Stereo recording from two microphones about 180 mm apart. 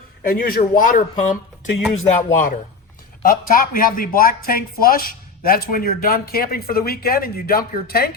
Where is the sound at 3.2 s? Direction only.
50° left (ahead or behind).